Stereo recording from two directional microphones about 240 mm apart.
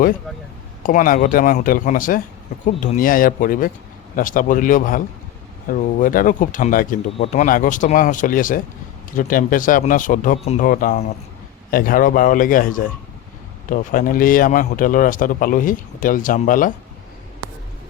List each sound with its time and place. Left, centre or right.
0.8 s speech: left